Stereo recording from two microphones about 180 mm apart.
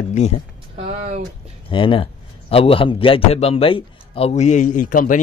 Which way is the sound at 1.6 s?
30° left (ahead or behind).